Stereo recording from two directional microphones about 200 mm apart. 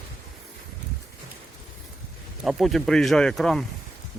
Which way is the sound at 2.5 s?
Centre (ahead or behind).